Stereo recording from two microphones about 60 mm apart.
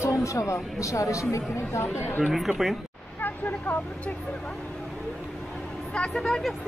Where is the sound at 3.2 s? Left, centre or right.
Left.